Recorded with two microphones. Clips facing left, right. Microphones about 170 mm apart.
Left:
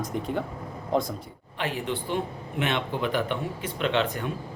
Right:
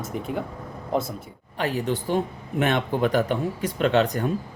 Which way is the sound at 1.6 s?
40° right (ahead or behind).